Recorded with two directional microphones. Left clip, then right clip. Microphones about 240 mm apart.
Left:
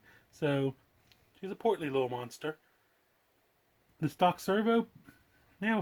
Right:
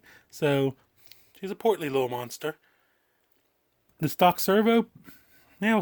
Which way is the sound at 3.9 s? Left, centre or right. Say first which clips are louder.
Right 7 dB; right.